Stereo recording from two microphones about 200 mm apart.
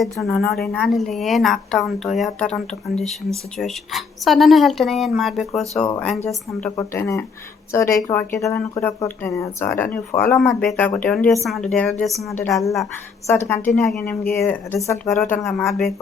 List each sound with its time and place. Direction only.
0.0 s a woman's voice: centre (ahead or behind)
12.4 s speech: 15° left (ahead or behind)
13.7 s a woman's voice: centre (ahead or behind)